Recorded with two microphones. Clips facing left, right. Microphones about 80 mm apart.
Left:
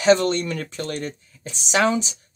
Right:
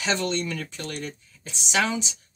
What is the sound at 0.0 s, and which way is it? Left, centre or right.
Speech, left.